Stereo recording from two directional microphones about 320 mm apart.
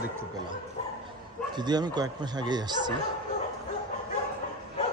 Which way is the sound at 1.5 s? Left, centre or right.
Centre.